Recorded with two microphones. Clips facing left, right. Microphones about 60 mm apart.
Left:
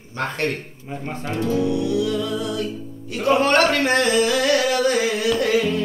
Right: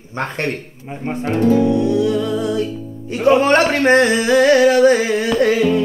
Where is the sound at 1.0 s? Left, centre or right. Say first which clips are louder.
Right 9 dB; right.